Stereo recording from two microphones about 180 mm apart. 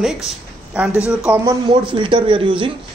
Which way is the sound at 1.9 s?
25° right (ahead or behind).